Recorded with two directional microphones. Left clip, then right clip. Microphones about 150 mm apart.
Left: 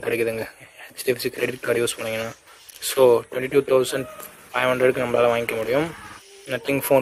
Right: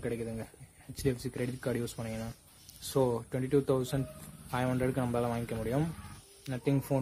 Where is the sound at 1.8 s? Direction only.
15° left (ahead or behind).